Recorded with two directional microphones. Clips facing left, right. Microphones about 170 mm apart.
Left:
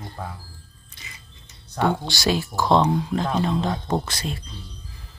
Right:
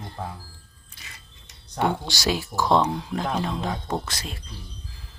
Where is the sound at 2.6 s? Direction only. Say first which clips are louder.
Left 1 dB; 15° left (ahead or behind).